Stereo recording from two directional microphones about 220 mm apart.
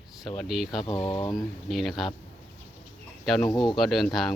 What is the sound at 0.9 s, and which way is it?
Chicken, 20° left (ahead or behind).